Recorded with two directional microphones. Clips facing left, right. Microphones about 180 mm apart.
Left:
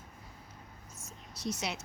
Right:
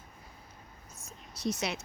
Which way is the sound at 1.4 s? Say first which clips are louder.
Right 3 dB; 60° right (ahead or behind).